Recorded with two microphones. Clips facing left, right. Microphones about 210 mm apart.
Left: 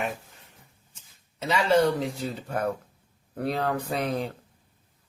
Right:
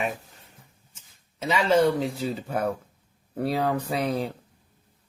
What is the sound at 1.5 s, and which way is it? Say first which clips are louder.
Speech: right 1 dB; centre (ahead or behind).